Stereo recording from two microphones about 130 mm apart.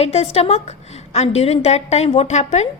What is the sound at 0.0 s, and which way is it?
A woman's voice, 55° left (ahead or behind).